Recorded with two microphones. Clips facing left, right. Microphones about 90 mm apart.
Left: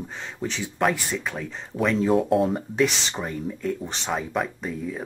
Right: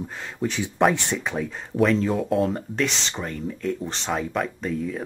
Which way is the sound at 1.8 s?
5° left (ahead or behind).